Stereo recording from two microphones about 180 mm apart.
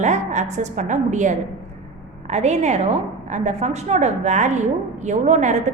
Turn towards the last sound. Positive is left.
turn(degrees=-40)  # may be behind; listen again after turning